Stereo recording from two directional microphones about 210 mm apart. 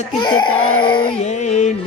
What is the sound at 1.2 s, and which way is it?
Music, 35° left (ahead or behind).